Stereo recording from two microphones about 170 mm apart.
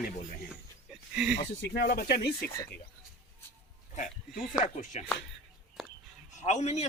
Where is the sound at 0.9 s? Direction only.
5° right (ahead or behind).